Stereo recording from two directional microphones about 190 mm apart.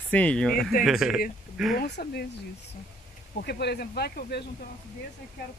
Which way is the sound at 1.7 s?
60° left (ahead or behind).